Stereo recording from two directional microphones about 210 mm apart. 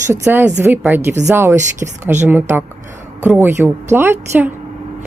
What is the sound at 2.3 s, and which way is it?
A woman's voice, 10° right (ahead or behind).